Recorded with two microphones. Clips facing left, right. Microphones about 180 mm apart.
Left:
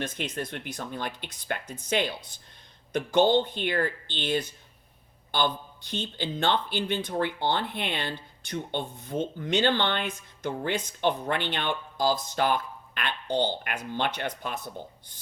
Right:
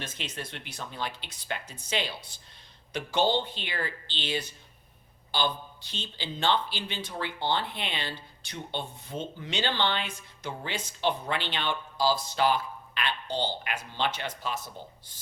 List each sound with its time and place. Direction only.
0.0 s a woman's voice: 55° left (ahead or behind)